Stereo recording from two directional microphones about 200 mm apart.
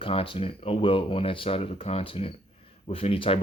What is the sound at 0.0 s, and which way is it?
Speech, 25° left (ahead or behind).